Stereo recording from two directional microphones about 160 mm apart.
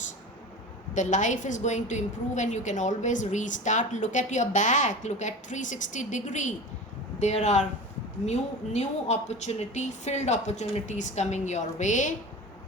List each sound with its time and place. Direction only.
0.9 s a woman's voice: 50° left (ahead or behind)